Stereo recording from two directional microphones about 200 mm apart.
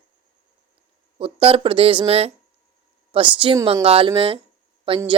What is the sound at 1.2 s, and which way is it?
Speech, 30° right (ahead or behind).